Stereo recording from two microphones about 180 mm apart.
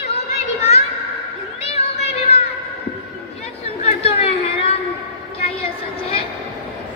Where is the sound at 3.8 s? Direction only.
35° left (ahead or behind).